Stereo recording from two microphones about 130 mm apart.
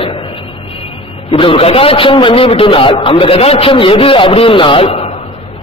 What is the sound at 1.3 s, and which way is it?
A man's voice, 45° left (ahead or behind).